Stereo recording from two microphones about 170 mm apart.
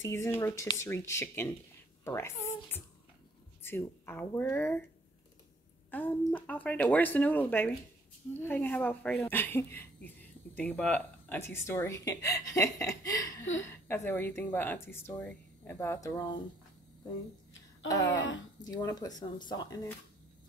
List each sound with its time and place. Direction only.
0.0 s speech: 15° left (ahead or behind)
5.9 s speech: 10° left (ahead or behind)
18.6 s speech: 25° left (ahead or behind)